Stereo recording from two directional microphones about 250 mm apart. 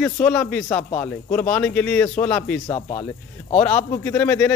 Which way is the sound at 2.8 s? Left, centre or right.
Left.